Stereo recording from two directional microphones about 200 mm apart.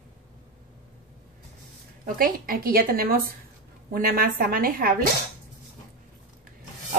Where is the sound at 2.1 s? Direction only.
45° right (ahead or behind).